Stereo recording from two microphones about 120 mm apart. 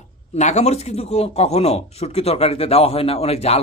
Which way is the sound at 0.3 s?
70° left (ahead or behind).